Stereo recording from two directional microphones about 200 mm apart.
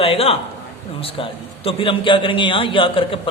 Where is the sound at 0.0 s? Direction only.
30° left (ahead or behind).